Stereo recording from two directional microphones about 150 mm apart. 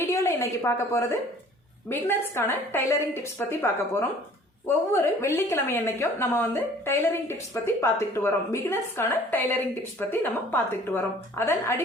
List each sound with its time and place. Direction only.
0.0 s a woman's voice: 20° left (ahead or behind)